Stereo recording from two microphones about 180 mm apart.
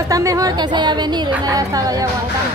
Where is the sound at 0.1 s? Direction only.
20° right (ahead or behind).